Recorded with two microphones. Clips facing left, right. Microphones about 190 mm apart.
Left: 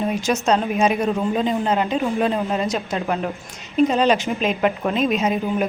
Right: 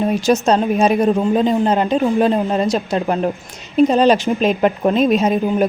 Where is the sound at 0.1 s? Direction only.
35° right (ahead or behind).